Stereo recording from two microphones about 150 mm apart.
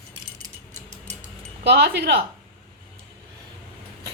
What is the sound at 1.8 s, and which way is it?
Speech, 90° right.